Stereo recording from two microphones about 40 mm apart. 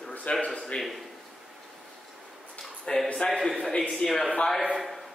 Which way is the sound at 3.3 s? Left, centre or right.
Centre.